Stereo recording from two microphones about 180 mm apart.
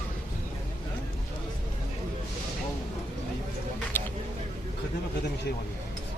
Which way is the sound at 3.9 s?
10° left (ahead or behind).